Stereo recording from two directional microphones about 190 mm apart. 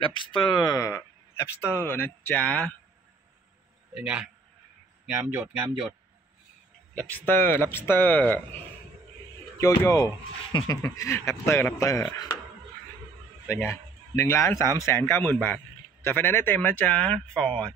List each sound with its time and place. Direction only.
0.0 s speech: 25° left (ahead or behind); by 2.7 s 10° left (ahead or behind)
3.9 s speech: 5° right (ahead or behind)
7.0 s speech: 10° left (ahead or behind)
13.5 s a man's voice: 15° left (ahead or behind)